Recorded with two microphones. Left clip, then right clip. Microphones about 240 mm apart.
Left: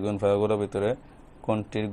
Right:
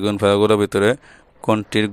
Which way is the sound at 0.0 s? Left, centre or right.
Right.